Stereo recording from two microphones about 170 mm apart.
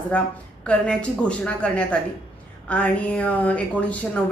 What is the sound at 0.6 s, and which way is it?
A woman's voice, 5° left (ahead or behind).